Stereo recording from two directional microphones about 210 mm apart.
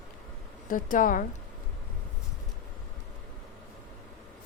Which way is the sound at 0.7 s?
40° left (ahead or behind).